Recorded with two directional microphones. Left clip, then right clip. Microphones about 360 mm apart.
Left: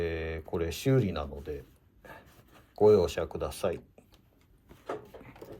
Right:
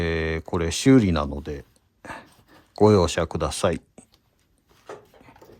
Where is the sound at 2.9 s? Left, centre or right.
Right.